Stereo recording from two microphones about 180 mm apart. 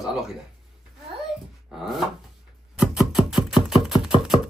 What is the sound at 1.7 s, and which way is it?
Speech, centre (ahead or behind).